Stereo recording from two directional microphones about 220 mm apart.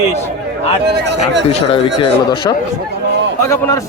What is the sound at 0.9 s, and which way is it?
Speech, 50° right (ahead or behind).